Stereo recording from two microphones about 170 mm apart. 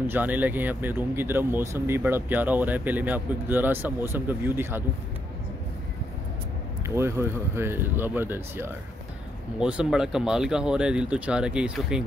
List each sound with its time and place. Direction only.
0.0 s speech: 10° right (ahead or behind)
7.0 s speech: 15° right (ahead or behind)